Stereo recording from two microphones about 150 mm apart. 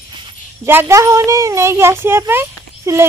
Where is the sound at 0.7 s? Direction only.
15° right (ahead or behind).